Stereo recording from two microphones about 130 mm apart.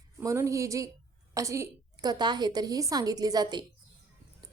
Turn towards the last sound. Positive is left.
turn(degrees=-30)  # may be behind; listen again after turning